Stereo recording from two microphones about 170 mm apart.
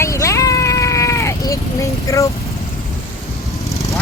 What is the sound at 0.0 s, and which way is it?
Sheep, 20° left (ahead or behind).